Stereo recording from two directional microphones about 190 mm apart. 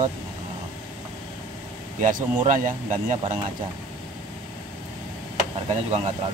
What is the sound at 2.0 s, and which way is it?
Speech, 45° right (ahead or behind).